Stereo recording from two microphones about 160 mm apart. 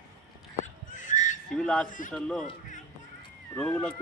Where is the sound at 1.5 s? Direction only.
5° left (ahead or behind).